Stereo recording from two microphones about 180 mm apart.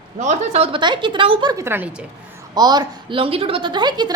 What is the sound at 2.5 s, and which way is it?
A woman's voice, 20° right (ahead or behind).